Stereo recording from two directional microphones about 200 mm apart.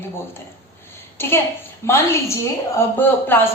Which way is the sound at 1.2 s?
10° left (ahead or behind).